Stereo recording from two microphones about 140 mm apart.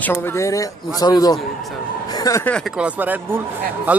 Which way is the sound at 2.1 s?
25° left (ahead or behind).